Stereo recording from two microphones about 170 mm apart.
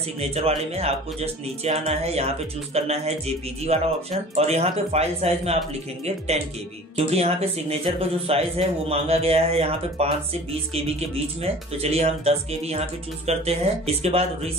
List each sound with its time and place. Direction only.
0.2 s speech: 35° right (ahead or behind)